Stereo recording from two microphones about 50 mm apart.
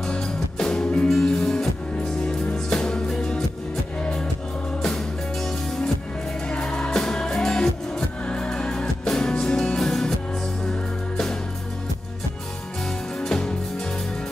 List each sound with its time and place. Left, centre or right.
0.0 s music: centre
4.8 s music: centre
6.4 s music: centre
9.8 s music: centre
10.6 s music: centre
12.8 s music: centre